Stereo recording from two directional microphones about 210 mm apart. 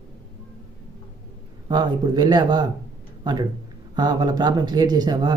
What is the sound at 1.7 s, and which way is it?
Speech, 20° right (ahead or behind).